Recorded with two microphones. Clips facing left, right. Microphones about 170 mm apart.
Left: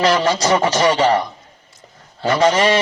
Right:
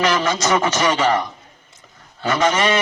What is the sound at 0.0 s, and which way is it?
A man's voice, 35° left (ahead or behind).